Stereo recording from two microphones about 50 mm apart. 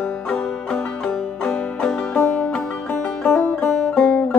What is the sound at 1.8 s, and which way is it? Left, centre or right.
Music, centre.